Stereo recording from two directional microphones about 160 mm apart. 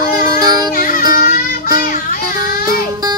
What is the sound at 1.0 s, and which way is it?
Music, 25° right (ahead or behind).